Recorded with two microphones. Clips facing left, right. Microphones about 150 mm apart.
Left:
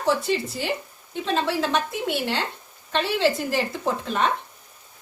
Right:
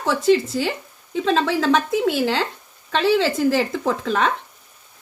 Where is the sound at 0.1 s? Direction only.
90° right.